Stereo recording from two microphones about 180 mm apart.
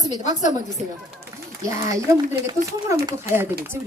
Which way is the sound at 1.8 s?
20° right (ahead or behind).